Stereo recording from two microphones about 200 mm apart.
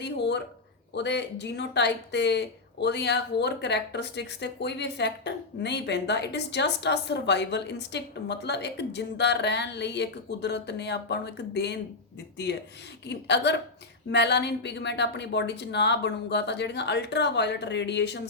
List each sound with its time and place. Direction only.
0.0 s speech: 55° left (ahead or behind)
13.1 s speech: 60° left (ahead or behind)